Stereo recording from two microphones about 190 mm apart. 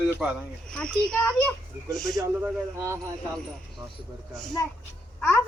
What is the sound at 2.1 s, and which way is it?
Speech, 15° right (ahead or behind).